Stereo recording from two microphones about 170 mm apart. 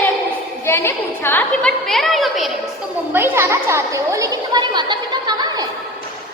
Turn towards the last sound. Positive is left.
turn(degrees=-25)  # may be behind; listen again after turning